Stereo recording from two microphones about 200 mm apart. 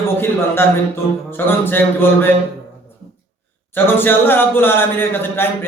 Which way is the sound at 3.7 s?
10° left (ahead or behind).